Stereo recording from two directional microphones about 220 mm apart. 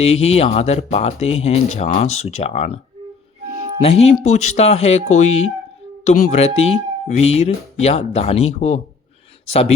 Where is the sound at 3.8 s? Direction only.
30° left (ahead or behind).